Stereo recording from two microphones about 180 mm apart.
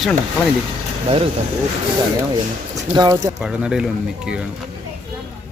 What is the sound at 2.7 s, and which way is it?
Speech, 20° right (ahead or behind).